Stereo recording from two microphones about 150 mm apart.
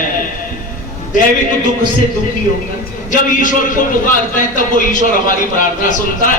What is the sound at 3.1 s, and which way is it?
A man's voice, 60° left (ahead or behind).